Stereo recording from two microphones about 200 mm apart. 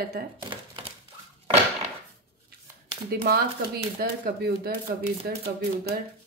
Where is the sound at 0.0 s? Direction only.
50° right (ahead or behind).